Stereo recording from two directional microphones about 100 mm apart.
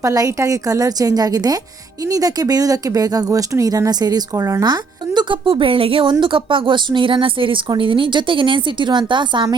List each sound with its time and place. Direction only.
0.0 s a woman's voice: 35° right (ahead or behind); by 9.6 s 50° right (ahead or behind)